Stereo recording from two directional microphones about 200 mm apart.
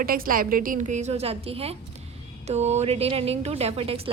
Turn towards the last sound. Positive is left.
turn(degrees=-30)  # may be behind; listen again after turning